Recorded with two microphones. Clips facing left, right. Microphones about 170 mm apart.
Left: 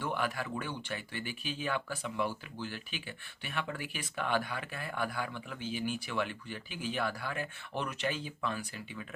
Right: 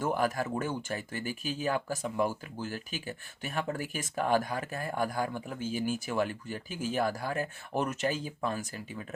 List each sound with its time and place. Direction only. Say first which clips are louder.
0.0 s speech: right 5 dB; 40° right (ahead or behind)